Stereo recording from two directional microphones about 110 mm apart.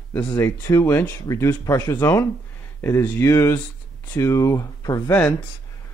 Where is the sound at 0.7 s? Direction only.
20° left (ahead or behind).